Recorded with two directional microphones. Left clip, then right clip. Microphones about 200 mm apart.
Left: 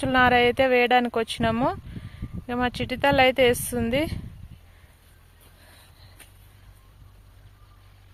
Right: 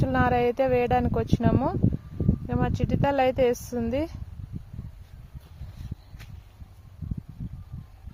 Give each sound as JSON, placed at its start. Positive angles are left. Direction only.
{"t": 0.0, "sound": "speech", "side_deg": 0}